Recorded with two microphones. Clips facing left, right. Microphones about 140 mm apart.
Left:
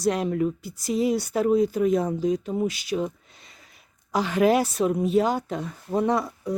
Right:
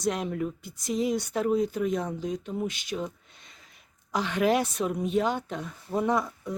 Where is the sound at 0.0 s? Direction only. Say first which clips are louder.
Left 5 dB; centre (ahead or behind).